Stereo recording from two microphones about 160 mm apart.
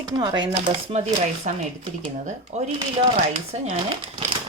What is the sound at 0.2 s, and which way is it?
Speech, 30° right (ahead or behind).